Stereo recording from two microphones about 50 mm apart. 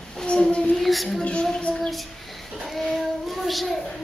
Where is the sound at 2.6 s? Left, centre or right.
Centre.